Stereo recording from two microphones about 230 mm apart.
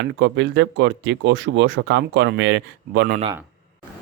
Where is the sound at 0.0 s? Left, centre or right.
Right.